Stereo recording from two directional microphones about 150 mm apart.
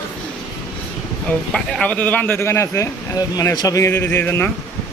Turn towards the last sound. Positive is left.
turn(degrees=15)  # may be behind; listen again after turning